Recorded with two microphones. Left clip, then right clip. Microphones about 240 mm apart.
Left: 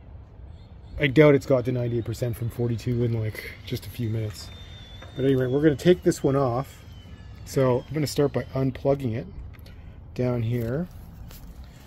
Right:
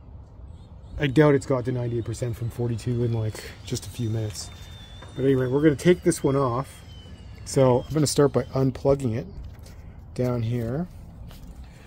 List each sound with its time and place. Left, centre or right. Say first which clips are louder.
0.9 s a man's voice: left 2 dB; centre
1.4 s speech: left 3 dB; left
7.6 s speech: right 4 dB; centre
10.1 s speech: even; centre